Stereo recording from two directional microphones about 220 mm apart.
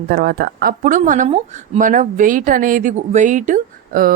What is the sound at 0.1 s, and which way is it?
Speech, 45° right (ahead or behind).